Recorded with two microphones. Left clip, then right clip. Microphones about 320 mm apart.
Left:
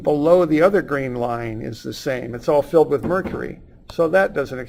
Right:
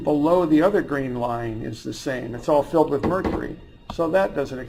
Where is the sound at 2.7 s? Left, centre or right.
Left.